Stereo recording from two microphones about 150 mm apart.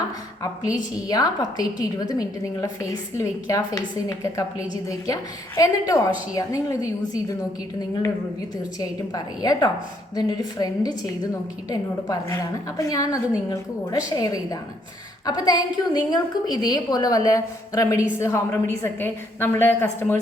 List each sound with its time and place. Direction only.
0.4 s a woman's voice: 20° left (ahead or behind)
8.8 s a woman's voice: 25° left (ahead or behind)